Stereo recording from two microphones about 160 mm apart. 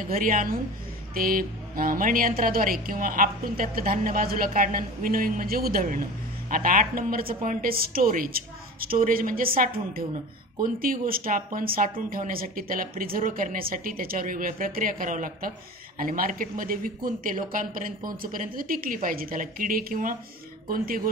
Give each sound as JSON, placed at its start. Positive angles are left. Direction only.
{"t": 0.1, "sound": "a woman's voice", "side_deg": -60}